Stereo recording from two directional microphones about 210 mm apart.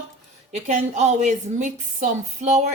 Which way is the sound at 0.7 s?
35° right (ahead or behind).